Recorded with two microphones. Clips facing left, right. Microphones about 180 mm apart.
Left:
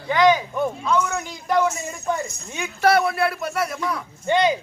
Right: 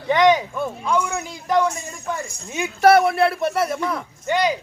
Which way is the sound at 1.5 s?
Centre (ahead or behind).